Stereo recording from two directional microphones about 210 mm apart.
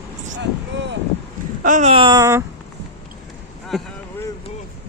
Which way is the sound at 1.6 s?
35° right (ahead or behind).